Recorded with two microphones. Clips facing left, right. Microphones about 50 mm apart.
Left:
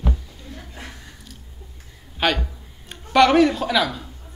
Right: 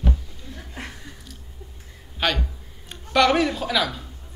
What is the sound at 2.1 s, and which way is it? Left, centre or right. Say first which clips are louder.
A man's voice: left 3 dB; centre.